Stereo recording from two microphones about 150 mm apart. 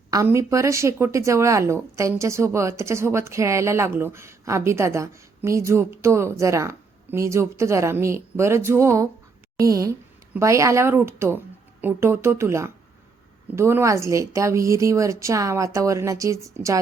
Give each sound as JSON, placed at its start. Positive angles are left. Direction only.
{"t": 0.1, "sound": "speech", "side_deg": -20}